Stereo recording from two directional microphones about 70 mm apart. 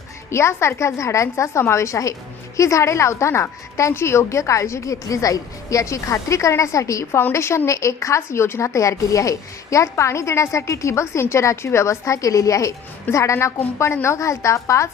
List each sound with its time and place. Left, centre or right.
0.3 s speech: left
7.1 s a woman's voice: left
7.3 s speech: left